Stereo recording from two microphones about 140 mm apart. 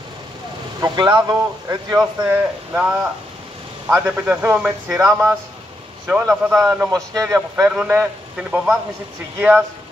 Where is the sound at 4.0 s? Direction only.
10° right (ahead or behind).